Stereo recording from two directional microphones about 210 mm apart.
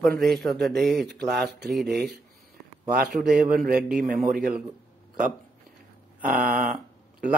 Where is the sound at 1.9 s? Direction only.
50° right (ahead or behind).